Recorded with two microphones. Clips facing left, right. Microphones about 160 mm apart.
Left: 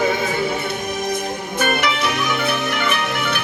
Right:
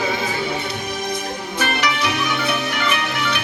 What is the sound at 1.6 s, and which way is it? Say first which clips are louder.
Music: left 2 dB; 50° left (ahead or behind).